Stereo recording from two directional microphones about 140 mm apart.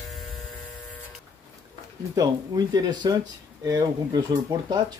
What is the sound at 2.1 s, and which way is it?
Speech, 25° right (ahead or behind).